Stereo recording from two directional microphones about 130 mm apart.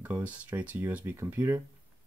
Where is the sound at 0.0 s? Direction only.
15° right (ahead or behind).